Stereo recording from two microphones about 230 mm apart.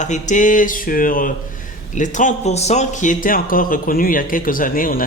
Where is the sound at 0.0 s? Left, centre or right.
Left.